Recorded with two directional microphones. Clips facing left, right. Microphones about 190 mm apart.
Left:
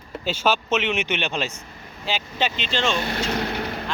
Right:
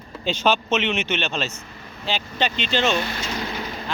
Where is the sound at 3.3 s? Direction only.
60° left (ahead or behind).